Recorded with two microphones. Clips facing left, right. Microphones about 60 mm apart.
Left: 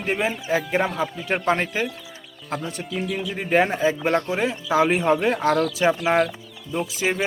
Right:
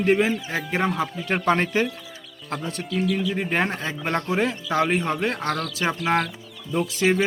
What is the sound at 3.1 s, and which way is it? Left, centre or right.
Speech, centre.